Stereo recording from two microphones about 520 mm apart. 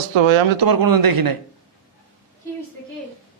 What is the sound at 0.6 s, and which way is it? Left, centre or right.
Speech, right.